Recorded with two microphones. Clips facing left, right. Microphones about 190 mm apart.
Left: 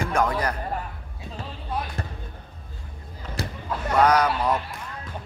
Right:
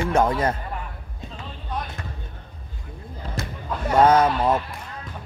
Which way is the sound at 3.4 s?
35° left (ahead or behind).